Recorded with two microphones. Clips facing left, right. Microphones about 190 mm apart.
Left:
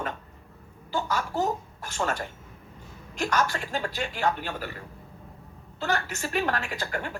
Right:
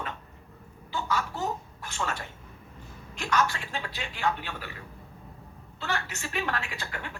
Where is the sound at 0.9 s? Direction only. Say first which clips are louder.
Left 2 dB; 40° left (ahead or behind).